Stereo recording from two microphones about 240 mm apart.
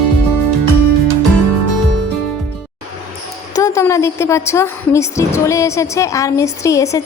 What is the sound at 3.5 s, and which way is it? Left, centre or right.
A woman's voice, centre.